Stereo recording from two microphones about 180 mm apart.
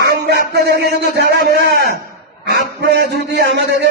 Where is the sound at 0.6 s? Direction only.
65° right (ahead or behind).